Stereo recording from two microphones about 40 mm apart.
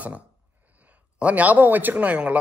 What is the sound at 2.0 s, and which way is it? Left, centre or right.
Speech, right.